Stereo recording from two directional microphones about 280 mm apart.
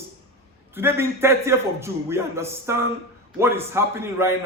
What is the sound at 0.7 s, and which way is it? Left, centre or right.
A man's voice, centre.